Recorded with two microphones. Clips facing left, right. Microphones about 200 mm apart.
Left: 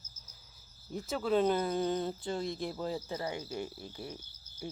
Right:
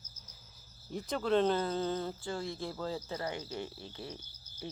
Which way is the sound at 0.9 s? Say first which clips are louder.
Even; 5° left (ahead or behind).